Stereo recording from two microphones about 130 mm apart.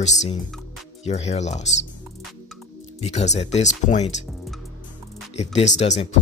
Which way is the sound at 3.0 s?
60° left (ahead or behind).